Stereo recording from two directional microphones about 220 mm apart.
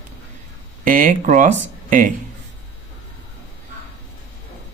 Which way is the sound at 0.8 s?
35° right (ahead or behind).